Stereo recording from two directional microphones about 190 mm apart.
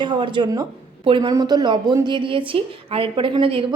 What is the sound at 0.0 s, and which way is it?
A woman's voice, 25° right (ahead or behind).